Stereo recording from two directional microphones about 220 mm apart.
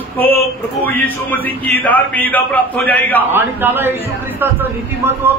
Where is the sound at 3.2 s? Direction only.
10° right (ahead or behind).